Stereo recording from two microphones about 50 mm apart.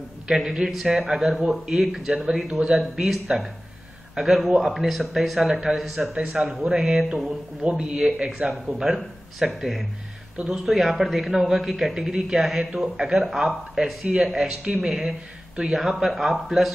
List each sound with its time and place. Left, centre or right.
0.3 s a man's voice: centre
4.2 s a man's voice: centre
6.2 s speech: centre
6.5 s a man's voice: centre
8.4 s speech: right
8.8 s a man's voice: centre
15.7 s a man's voice: centre